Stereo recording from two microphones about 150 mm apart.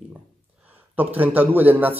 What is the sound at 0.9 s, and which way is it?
Speech, 10° right (ahead or behind).